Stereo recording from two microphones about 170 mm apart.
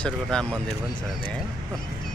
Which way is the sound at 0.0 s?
5° left (ahead or behind).